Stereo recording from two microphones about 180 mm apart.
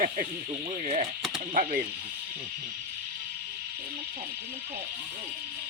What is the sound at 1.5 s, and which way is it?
Speech, 50° right (ahead or behind).